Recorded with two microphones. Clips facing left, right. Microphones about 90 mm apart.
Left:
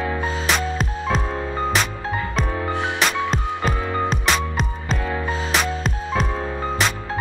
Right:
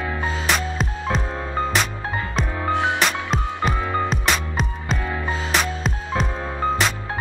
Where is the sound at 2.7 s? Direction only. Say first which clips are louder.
Right 3 dB; 20° right (ahead or behind).